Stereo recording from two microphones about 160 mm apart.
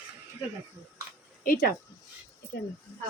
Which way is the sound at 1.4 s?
60° left (ahead or behind).